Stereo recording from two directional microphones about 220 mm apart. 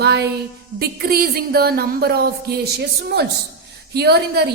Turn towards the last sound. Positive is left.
turn(degrees=-45)  # may be behind; listen again after turning